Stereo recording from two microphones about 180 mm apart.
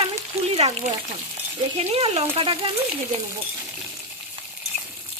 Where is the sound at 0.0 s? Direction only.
30° right (ahead or behind).